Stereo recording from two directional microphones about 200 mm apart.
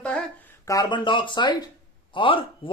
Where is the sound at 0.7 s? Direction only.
20° left (ahead or behind).